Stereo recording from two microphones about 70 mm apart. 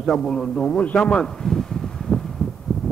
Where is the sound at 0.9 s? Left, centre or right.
Centre.